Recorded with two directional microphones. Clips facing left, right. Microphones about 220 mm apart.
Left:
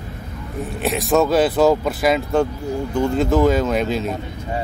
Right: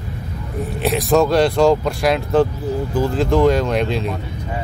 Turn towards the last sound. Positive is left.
turn(degrees=0)  # may be behind; listen again after turning